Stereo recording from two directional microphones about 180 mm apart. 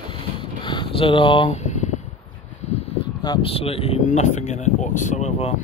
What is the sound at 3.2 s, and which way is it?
Speech, 25° left (ahead or behind).